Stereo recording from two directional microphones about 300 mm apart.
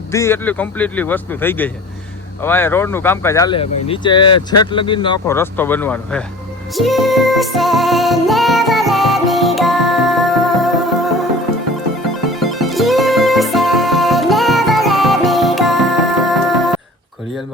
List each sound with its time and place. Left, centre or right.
0.1 s speech: centre
6.7 s music: centre
12.3 s music: centre